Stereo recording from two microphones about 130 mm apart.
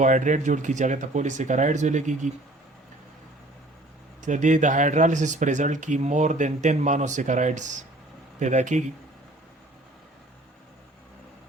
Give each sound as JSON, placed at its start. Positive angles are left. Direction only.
{"t": 0.0, "sound": "speech", "side_deg": -75}
{"t": 4.2, "sound": "speech", "side_deg": -70}